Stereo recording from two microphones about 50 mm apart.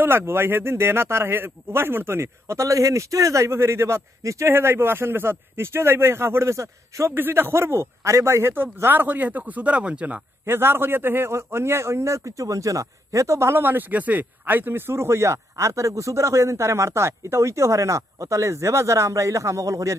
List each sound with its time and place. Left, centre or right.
0.0 s a man's voice: right
4.5 s a man's voice: right
7.2 s a man's voice: right
7.5 s a man's voice: right
8.0 s a man's voice: right
9.0 s speech: right
10.4 s a man's voice: right
11.3 s a man's voice: right
13.7 s speech: right